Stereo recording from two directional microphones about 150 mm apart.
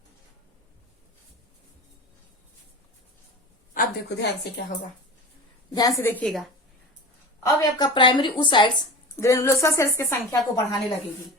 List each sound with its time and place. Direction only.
3.8 s speech: 90° left
6.0 s a woman's voice: 15° left (ahead or behind)
6.2 s a woman's voice: centre (ahead or behind)
7.4 s a woman's voice: 25° left (ahead or behind)
9.2 s speech: 20° left (ahead or behind)